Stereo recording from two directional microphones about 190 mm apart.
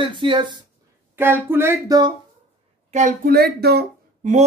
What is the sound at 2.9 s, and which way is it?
Speech, 45° right (ahead or behind).